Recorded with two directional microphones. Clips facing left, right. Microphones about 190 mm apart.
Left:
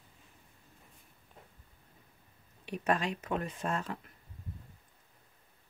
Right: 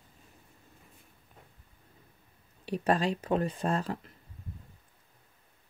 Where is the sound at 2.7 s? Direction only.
35° right (ahead or behind).